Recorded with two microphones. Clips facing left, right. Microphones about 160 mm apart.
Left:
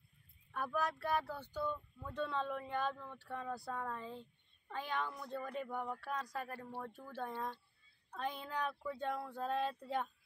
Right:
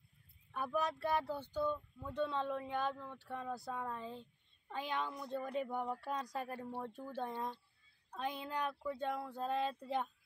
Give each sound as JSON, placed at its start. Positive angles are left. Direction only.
{"t": 0.5, "sound": "child singing", "side_deg": -15}
{"t": 1.5, "sound": "speech", "side_deg": -15}